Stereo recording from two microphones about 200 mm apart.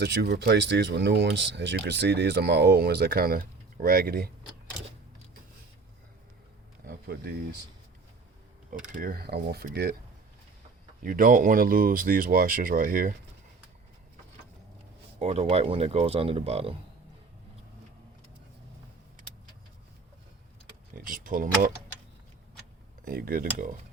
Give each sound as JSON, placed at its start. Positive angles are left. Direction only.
{"t": 0.0, "sound": "speech", "side_deg": -55}
{"t": 6.8, "sound": "a sound", "side_deg": -50}
{"t": 8.9, "sound": "speech", "side_deg": -45}
{"t": 11.0, "sound": "speech", "side_deg": -45}
{"t": 15.2, "sound": "speech", "side_deg": -30}
{"t": 20.9, "sound": "speech", "side_deg": -45}
{"t": 23.0, "sound": "speech", "side_deg": -45}